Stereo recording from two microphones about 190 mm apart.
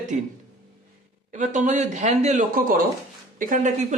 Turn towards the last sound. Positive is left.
turn(degrees=-40)  # may be behind; listen again after turning